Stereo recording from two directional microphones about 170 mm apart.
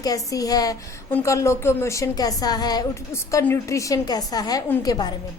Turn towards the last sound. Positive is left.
turn(degrees=25)  # may be behind; listen again after turning